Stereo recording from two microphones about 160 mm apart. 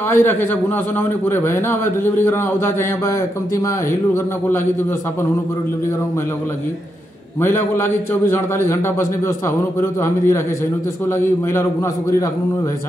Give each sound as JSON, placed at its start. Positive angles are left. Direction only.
{"t": 0.1, "sound": "a man's voice", "side_deg": 15}
{"t": 8.3, "sound": "a man's voice", "side_deg": 15}
{"t": 9.8, "sound": "a man's voice", "side_deg": 15}